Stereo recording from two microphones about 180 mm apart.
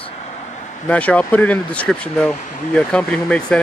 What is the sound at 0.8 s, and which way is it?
Speech, 5° left (ahead or behind).